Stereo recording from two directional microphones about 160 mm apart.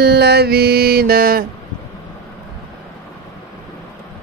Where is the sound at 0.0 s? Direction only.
90° right; by 1.4 s 70° right (ahead or behind).